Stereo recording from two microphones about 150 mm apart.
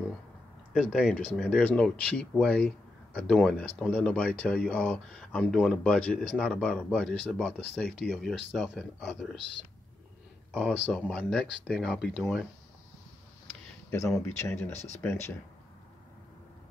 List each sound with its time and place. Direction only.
1.3 s speech: 5° left (ahead or behind)
10.5 s speech: 5° left (ahead or behind)
13.8 s speech: 20° left (ahead or behind)